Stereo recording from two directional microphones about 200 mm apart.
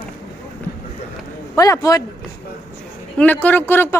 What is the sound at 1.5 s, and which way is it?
Speech, 15° left (ahead or behind).